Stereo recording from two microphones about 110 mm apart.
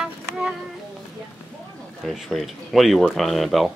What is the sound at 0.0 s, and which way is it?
Child singing, 5° right (ahead or behind).